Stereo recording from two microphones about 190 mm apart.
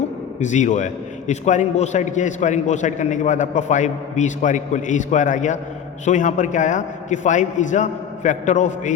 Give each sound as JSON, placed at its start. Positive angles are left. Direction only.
{"t": 0.3, "sound": "a man's voice", "side_deg": 40}